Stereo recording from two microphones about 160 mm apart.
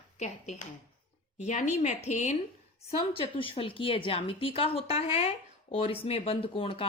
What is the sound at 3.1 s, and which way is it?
A woman's voice, 35° left (ahead or behind).